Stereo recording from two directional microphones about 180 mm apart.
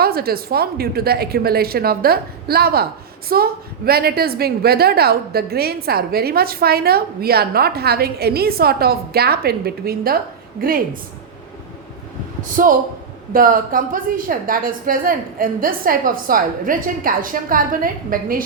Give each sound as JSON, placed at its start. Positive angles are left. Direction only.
{"t": 0.0, "sound": "a woman's voice", "side_deg": -55}
{"t": 12.4, "sound": "a woman's voice", "side_deg": -50}